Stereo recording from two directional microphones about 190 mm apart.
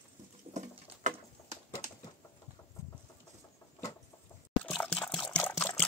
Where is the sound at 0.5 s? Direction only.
40° right (ahead or behind).